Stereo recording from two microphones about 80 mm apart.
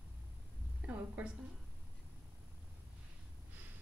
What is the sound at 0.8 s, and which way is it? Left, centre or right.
Speech, right.